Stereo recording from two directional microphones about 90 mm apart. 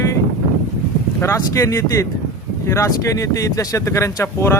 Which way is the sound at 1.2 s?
35° left (ahead or behind).